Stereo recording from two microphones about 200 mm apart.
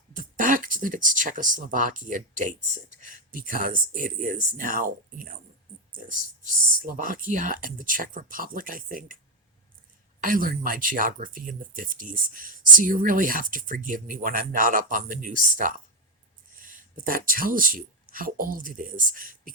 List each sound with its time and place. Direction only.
0.1 s speech: 40° right (ahead or behind)
10.2 s speech: 40° right (ahead or behind)